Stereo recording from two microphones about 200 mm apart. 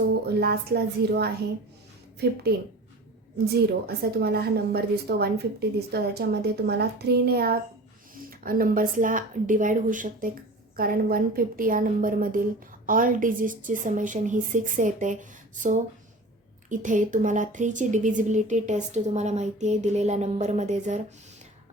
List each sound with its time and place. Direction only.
0.3 s a woman's voice: 55° right (ahead or behind)
3.5 s a woman's voice: 50° right (ahead or behind); by 21.0 s 35° right (ahead or behind)